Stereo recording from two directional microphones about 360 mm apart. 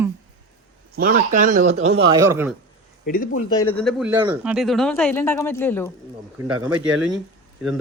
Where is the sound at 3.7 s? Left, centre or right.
Centre.